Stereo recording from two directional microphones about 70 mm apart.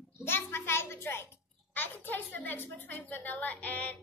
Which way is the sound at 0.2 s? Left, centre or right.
Left.